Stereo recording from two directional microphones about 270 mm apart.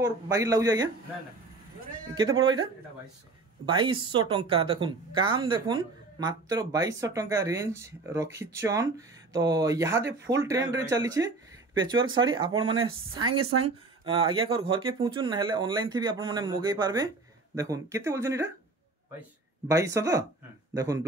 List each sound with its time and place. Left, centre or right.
0.0 s a woman's voice: centre
3.6 s a woman's voice: centre
13.4 s speech: right
13.7 s a woman's voice: centre
19.7 s a woman's voice: centre